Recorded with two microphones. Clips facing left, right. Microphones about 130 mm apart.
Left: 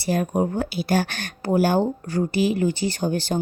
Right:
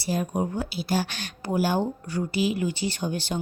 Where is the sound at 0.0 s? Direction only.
55° left (ahead or behind).